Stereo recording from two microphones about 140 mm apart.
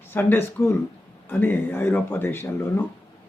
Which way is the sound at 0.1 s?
15° left (ahead or behind).